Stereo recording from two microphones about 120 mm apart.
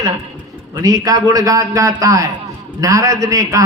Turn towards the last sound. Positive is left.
turn(degrees=-25)  # may be behind; listen again after turning